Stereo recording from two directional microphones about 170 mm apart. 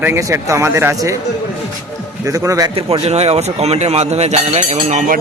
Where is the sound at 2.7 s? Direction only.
35° right (ahead or behind).